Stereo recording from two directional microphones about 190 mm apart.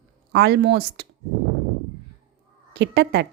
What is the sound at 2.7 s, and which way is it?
Speech, 65° right (ahead or behind).